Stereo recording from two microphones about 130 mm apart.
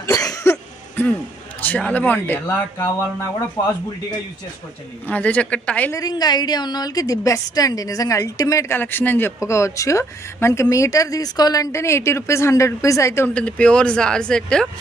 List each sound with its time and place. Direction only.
0.0 s cough: 25° left (ahead or behind)
1.6 s speech: 10° left (ahead or behind)
3.6 s a woman's voice: 25° left (ahead or behind)
5.0 s speech: 10° left (ahead or behind)
5.9 s a woman's voice: 30° left (ahead or behind)
13.3 s speech: 10° left (ahead or behind)